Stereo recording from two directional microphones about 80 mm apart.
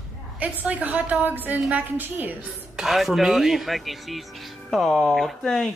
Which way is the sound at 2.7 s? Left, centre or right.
Centre.